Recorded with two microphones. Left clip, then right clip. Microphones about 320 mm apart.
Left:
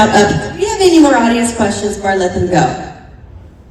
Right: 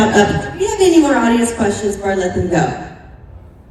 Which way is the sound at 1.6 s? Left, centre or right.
Left.